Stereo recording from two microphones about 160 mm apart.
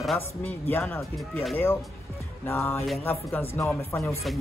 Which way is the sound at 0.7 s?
15° left (ahead or behind).